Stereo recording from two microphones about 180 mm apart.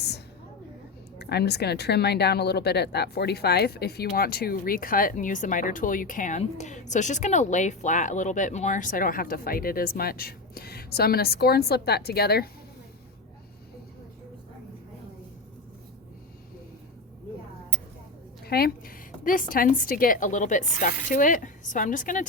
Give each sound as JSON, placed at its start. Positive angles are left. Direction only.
{"t": 1.2, "sound": "speech", "side_deg": 65}
{"t": 18.4, "sound": "a woman's voice", "side_deg": 60}